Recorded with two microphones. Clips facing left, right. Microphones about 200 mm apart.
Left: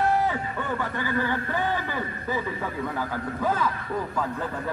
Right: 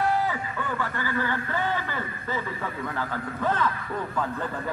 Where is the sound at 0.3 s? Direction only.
20° left (ahead or behind).